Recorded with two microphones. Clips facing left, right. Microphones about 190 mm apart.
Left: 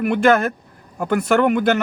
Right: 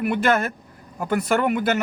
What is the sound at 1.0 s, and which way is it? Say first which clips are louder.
Speech: left 4 dB; 60° left (ahead or behind).